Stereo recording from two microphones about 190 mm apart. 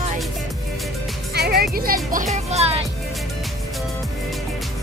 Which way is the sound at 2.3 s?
35° right (ahead or behind).